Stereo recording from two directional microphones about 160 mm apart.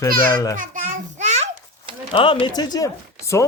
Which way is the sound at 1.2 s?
45° right (ahead or behind).